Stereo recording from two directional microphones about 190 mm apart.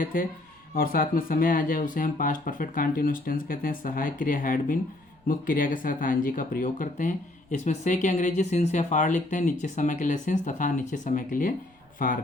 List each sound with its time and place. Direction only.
0.0 s speech: 45° left (ahead or behind)